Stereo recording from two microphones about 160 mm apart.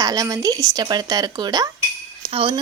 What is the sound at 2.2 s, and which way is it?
Speech, 35° right (ahead or behind).